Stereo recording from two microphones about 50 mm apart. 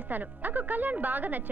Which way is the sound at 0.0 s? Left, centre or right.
Right.